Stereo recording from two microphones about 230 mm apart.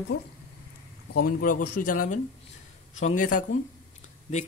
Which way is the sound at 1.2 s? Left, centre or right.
Left.